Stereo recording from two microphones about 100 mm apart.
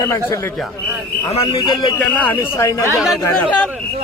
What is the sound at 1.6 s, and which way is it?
Speech, 45° left (ahead or behind).